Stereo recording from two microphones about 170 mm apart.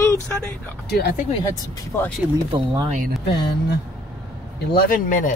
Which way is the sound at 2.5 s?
25° right (ahead or behind).